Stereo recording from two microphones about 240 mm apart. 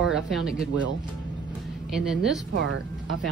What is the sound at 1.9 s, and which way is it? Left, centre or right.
Speech, centre.